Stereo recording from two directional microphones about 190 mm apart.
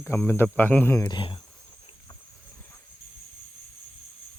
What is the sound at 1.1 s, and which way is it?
Speech, 25° left (ahead or behind).